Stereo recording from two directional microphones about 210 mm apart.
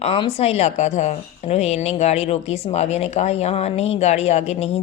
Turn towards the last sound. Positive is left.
turn(degrees=30)  # may be behind; listen again after turning